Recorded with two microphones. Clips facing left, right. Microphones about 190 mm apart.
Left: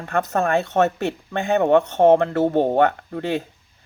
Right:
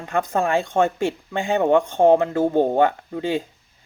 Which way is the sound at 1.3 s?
15° right (ahead or behind).